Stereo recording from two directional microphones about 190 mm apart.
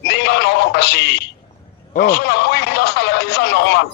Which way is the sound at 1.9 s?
55° left (ahead or behind).